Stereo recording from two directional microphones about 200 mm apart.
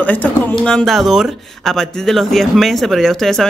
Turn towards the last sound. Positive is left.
turn(degrees=0)  # may be behind; listen again after turning